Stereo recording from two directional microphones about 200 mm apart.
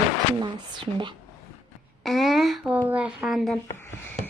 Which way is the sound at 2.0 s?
Centre (ahead or behind).